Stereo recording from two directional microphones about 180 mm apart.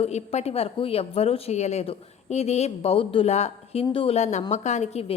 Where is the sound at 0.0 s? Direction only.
35° left (ahead or behind).